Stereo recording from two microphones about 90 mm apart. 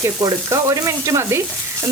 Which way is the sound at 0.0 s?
40° right (ahead or behind).